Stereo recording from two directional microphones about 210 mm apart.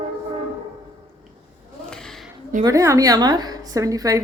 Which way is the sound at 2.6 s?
15° right (ahead or behind).